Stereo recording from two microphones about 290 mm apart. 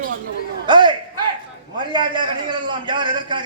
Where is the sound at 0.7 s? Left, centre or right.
Centre.